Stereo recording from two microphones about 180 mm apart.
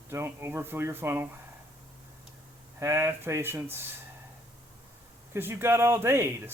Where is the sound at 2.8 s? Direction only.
15° right (ahead or behind).